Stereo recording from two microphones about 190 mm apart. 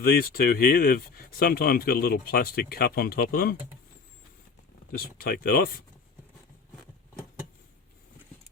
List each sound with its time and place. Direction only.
0.0 s speech: 50° left (ahead or behind)
4.9 s speech: 50° left (ahead or behind)